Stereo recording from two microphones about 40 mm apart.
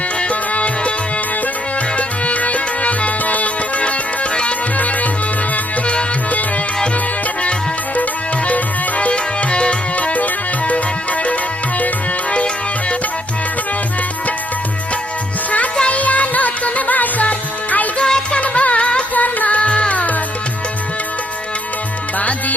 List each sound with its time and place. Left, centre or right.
0.2 s music: left
2.0 s music: left
8.4 s music: left
15.8 s music: left
18.0 s music: left
18.3 s music: left
19.1 s music: left
22.2 s music: left